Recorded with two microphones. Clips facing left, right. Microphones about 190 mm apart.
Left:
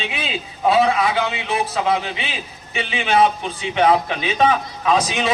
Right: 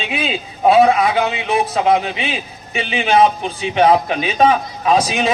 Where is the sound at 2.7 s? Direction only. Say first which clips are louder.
Right 3 dB; 40° right (ahead or behind).